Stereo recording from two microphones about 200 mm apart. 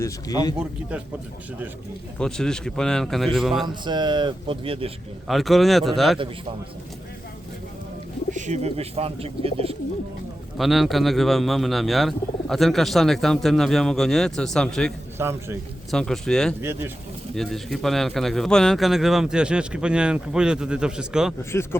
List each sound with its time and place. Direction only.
0.0 s speech: 20° left (ahead or behind)
0.6 s speech: 5° right (ahead or behind)
2.1 s speech: 5° left (ahead or behind)
3.8 s speech: 20° right (ahead or behind)
5.3 s speech: centre (ahead or behind)
8.3 s speech: 35° right (ahead or behind)
10.6 s speech: centre (ahead or behind)
15.2 s a man's voice: 10° right (ahead or behind)
15.9 s speech: centre (ahead or behind)
16.6 s a man's voice: 10° right (ahead or behind)
17.3 s speech: centre (ahead or behind)
21.5 s a man's voice: 15° left (ahead or behind)